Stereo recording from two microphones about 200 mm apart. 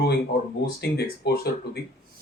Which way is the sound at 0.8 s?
55° left (ahead or behind).